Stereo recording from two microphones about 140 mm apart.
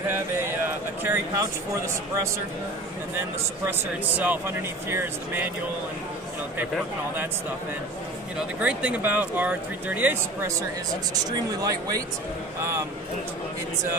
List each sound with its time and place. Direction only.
1.0 s speech: 15° right (ahead or behind)
4.2 s speech: 15° right (ahead or behind)
8.5 s speech: 10° right (ahead or behind)
11.6 s a man's voice: 25° right (ahead or behind)